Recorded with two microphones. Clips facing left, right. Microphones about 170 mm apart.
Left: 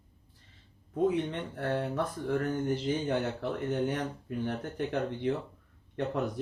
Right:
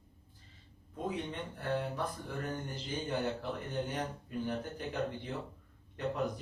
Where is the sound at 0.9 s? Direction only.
70° left (ahead or behind).